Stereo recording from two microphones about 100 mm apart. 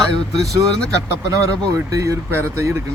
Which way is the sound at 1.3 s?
35° right (ahead or behind).